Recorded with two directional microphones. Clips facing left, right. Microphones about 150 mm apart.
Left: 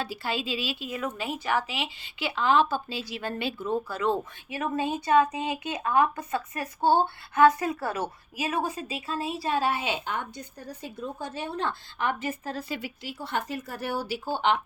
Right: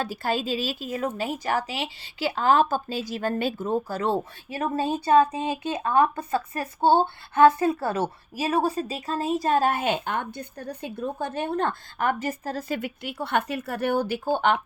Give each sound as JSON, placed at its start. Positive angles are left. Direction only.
{"t": 0.0, "sound": "speech", "side_deg": -45}